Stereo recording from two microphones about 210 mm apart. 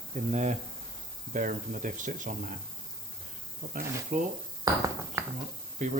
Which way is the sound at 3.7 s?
40° right (ahead or behind).